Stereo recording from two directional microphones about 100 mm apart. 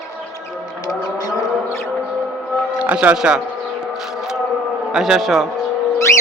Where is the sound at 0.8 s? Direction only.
40° left (ahead or behind).